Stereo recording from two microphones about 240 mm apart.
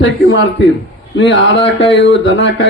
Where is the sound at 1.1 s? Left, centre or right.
Left.